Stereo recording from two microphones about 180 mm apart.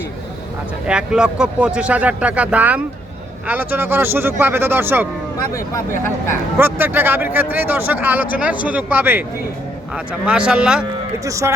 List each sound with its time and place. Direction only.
0.9 s speech: 5° right (ahead or behind)
6.6 s speech: 10° right (ahead or behind)
10.2 s speech: 5° right (ahead or behind)
11.3 s speech: 15° right (ahead or behind)